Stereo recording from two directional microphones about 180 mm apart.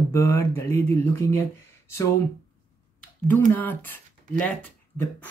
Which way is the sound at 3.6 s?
10° left (ahead or behind).